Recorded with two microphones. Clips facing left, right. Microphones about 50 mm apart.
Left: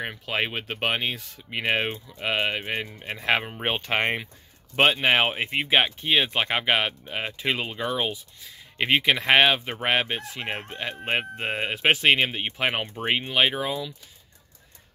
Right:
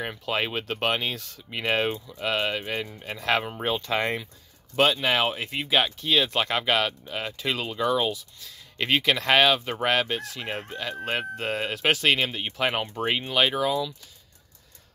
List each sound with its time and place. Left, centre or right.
0.0 s speech: centre
3.6 s speech: left; by 13.9 s centre